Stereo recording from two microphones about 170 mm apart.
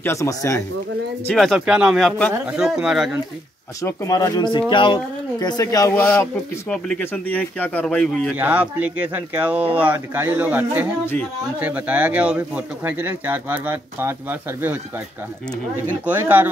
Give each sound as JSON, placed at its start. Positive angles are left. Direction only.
{"t": 0.0, "sound": "speech", "side_deg": 15}
{"t": 1.3, "sound": "speech", "side_deg": 0}
{"t": 3.8, "sound": "speech", "side_deg": 20}
{"t": 8.3, "sound": "speech", "side_deg": -10}
{"t": 16.1, "sound": "speech", "side_deg": -10}